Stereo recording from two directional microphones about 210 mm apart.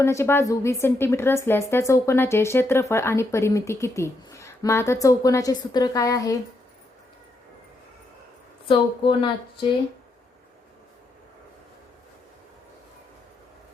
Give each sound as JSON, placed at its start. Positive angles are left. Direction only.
{"t": 0.0, "sound": "a woman's voice", "side_deg": 15}
{"t": 8.6, "sound": "speech", "side_deg": 25}